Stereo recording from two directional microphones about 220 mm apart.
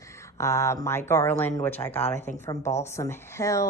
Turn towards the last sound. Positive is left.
turn(degrees=15)  # may be behind; listen again after turning